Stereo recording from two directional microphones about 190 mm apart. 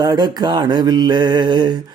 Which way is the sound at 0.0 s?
20° right (ahead or behind).